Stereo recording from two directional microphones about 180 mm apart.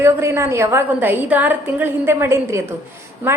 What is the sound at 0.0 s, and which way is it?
A woman's voice, 15° right (ahead or behind).